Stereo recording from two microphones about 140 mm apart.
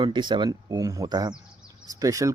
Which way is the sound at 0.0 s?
35° right (ahead or behind).